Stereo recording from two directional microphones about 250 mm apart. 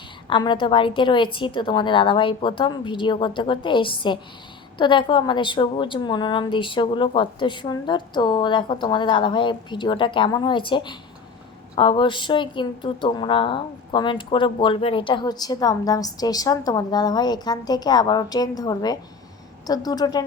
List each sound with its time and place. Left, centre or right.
0.3 s a woman's voice: centre